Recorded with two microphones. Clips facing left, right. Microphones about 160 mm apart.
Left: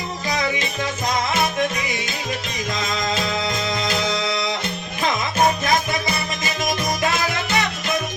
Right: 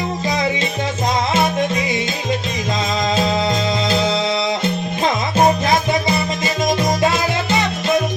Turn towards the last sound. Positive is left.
turn(degrees=-25)  # may be behind; listen again after turning